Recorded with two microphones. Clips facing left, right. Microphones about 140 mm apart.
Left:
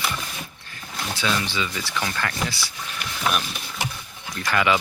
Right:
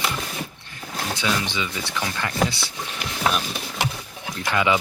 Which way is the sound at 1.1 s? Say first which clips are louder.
Even; 15° right (ahead or behind).